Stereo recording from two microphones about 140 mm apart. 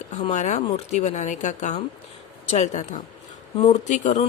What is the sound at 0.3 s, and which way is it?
Speech, 55° left (ahead or behind).